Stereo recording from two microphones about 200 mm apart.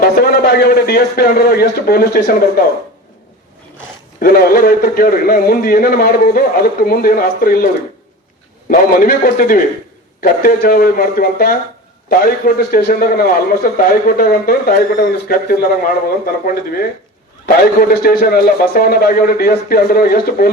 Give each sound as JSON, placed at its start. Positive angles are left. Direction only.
{"t": 0.0, "sound": "a man's voice", "side_deg": 50}
{"t": 4.2, "sound": "a man's voice", "side_deg": 50}
{"t": 8.7, "sound": "a man's voice", "side_deg": 45}
{"t": 18.0, "sound": "a man's voice", "side_deg": 50}